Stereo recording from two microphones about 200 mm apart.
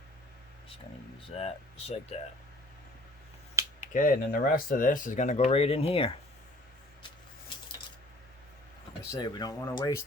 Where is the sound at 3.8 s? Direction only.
45° left (ahead or behind).